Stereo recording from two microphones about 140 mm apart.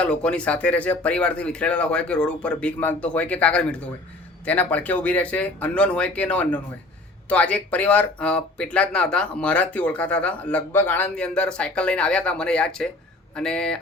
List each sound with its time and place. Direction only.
0.0 s speech: 10° left (ahead or behind)